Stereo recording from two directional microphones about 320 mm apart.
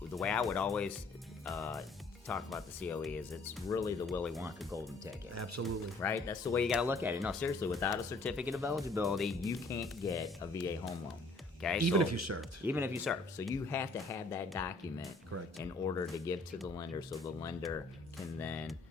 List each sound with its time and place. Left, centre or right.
0.2 s speech: centre
5.3 s speech: right
5.6 s speech: centre
6.7 s speech: centre
11.8 s speech: right
12.4 s speech: centre
13.4 s speech: centre